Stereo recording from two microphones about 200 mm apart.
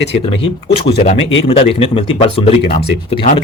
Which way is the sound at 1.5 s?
30° left (ahead or behind).